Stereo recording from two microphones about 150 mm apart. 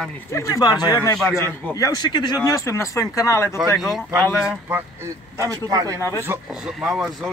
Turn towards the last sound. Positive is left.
turn(degrees=-5)  # may be behind; listen again after turning